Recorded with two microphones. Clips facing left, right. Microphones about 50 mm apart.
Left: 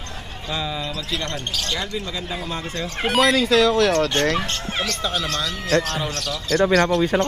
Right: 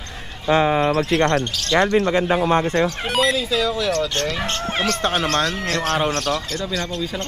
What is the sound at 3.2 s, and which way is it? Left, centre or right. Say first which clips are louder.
Speech: left 3 dB; left.